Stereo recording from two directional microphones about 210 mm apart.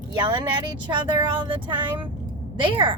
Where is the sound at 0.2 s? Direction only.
20° right (ahead or behind).